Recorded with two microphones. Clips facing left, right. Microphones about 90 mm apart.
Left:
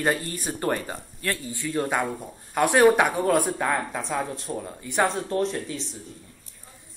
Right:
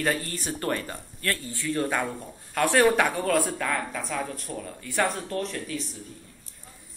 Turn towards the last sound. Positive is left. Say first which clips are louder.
# left 4 dB
turn(degrees=25)  # may be behind; listen again after turning